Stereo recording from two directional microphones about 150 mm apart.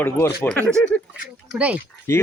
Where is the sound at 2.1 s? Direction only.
15° left (ahead or behind).